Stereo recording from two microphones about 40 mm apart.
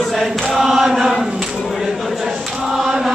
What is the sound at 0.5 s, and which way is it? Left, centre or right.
Chant, centre.